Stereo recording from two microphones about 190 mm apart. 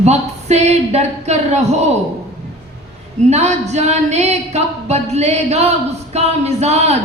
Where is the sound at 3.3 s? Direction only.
35° right (ahead or behind).